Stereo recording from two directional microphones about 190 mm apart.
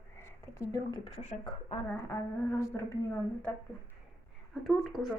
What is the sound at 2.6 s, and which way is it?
Speech, 15° left (ahead or behind).